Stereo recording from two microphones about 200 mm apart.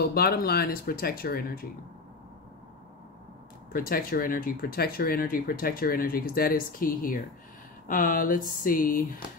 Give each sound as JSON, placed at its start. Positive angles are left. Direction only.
{"t": 0.0, "sound": "speech", "side_deg": 50}
{"t": 3.7, "sound": "speech", "side_deg": 45}